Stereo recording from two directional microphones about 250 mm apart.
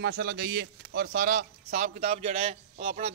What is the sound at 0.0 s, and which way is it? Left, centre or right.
A man's voice, right.